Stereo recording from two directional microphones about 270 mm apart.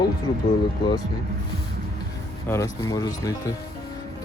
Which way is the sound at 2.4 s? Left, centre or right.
Centre.